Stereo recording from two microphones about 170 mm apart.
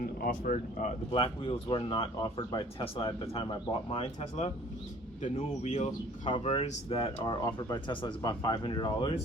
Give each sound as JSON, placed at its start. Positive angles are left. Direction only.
{"t": 0.0, "sound": "speech", "side_deg": 60}
{"t": 1.1, "sound": "speech", "side_deg": 30}
{"t": 6.2, "sound": "speech", "side_deg": 30}